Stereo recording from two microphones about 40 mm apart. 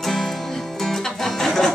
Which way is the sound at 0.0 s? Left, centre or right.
Centre.